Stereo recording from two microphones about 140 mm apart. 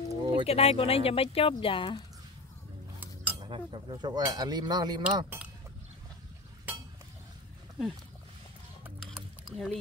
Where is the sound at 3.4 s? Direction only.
35° right (ahead or behind).